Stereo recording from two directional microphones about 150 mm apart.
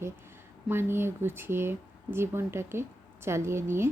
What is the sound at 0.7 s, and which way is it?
Speech, 15° right (ahead or behind).